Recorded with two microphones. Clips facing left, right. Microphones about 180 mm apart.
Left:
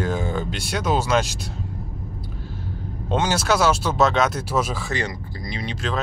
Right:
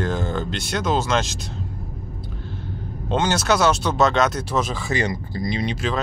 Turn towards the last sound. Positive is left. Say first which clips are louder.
# right 6 dB
turn(degrees=-20)  # may be behind; listen again after turning